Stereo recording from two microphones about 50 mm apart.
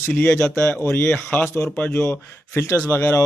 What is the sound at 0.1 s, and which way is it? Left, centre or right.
Speech, left.